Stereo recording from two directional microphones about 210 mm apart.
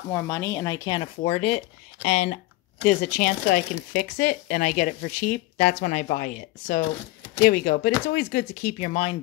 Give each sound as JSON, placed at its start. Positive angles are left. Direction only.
{"t": 0.1, "sound": "speech", "side_deg": 10}